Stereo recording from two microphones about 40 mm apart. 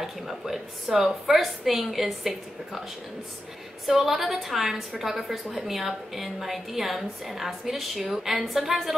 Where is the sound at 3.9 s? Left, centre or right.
Centre.